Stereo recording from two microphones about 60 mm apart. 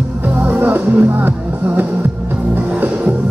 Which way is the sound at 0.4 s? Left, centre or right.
Right.